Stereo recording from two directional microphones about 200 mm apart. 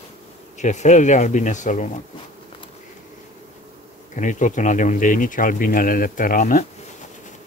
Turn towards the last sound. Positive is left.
turn(degrees=40)  # may be behind; listen again after turning